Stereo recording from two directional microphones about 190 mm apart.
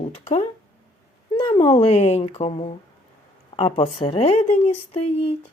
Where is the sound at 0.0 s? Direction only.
35° left (ahead or behind).